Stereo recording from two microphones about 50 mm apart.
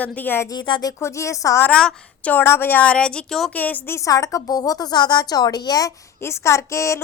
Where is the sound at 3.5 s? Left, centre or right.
Left.